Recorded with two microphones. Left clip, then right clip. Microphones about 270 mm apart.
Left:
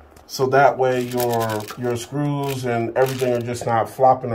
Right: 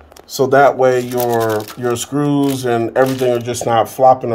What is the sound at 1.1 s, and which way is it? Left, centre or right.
Speech, right.